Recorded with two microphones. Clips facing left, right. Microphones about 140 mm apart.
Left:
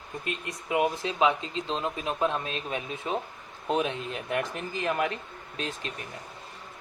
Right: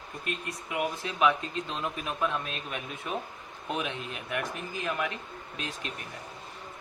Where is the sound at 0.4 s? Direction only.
25° left (ahead or behind).